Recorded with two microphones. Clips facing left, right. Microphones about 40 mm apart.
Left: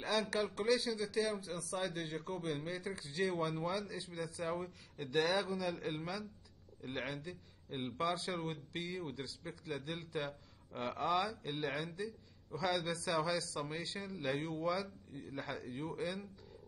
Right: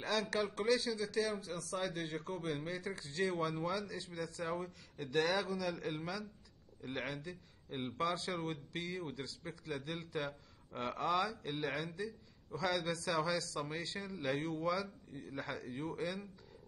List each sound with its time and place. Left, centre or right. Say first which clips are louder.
0.0 s a man's voice: even; centre